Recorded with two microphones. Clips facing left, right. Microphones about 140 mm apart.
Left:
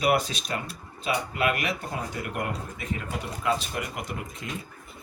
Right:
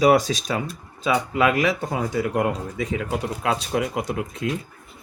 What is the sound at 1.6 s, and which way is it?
Speech, 90° right.